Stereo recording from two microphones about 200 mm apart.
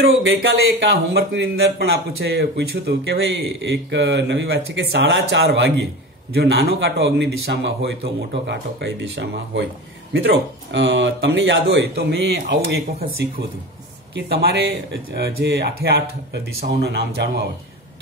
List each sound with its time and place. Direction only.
0.2 s speech: 60° right (ahead or behind)